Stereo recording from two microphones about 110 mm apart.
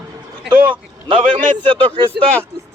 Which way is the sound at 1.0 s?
50° right (ahead or behind).